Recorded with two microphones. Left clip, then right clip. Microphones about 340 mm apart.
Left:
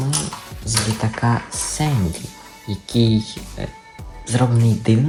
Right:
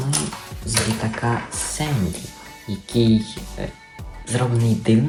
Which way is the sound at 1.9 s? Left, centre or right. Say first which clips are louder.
Left 1 dB; centre.